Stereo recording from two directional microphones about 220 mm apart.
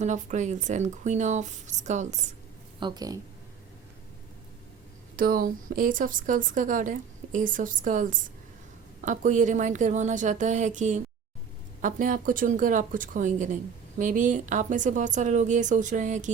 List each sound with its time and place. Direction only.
0.0 s a woman's voice: 35° right (ahead or behind)
2.8 s speech: 15° right (ahead or behind)
5.1 s a woman's voice: 40° right (ahead or behind)